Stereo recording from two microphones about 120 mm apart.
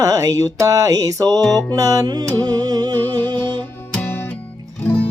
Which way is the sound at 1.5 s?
30° right (ahead or behind).